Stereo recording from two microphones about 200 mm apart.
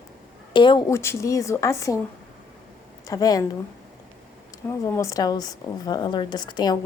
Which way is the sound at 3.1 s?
20° left (ahead or behind).